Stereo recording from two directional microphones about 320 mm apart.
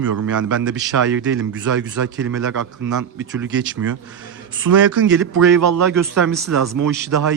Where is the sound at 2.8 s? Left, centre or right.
Right.